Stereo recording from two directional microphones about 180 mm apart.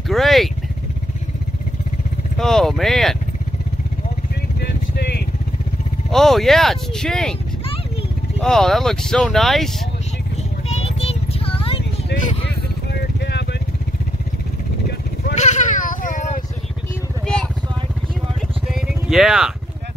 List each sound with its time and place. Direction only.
0.1 s vehicle: centre (ahead or behind)
2.3 s vehicle: centre (ahead or behind)
4.6 s vehicle: 65° left (ahead or behind)
6.0 s speech: centre (ahead or behind)
8.4 s speech: 5° left (ahead or behind)
10.3 s vehicle: 35° left (ahead or behind)
12.9 s vehicle: 70° left (ahead or behind)
15.3 s a sound: 40° left (ahead or behind)
18.7 s vehicle: centre (ahead or behind)